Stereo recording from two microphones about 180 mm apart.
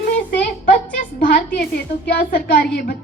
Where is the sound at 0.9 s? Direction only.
50° left (ahead or behind).